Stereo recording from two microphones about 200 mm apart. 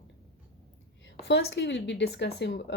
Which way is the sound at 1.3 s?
55° left (ahead or behind).